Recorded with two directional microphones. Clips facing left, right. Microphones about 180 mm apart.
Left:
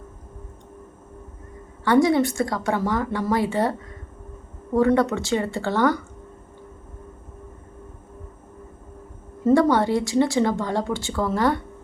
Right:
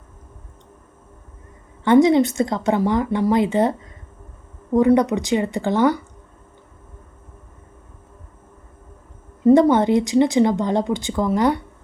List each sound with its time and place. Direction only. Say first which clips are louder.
1.8 s a woman's voice: right 4 dB; 20° right (ahead or behind)
9.4 s a woman's voice: right 4 dB; 20° right (ahead or behind)